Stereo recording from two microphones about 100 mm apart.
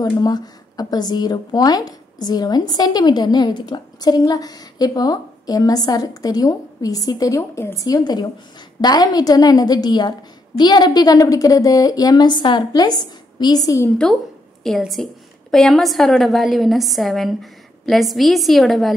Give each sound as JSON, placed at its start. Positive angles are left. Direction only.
{"t": 0.0, "sound": "speech", "side_deg": 40}
{"t": 14.8, "sound": "a woman's voice", "side_deg": 0}